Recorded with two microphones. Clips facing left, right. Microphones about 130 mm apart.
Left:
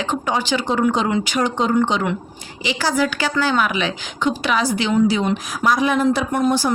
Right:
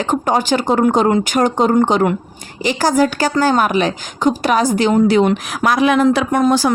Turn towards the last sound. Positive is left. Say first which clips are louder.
# right 4 dB
turn(degrees=-90)